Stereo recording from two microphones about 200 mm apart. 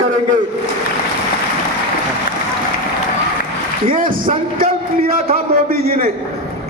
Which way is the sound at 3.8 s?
45° right (ahead or behind).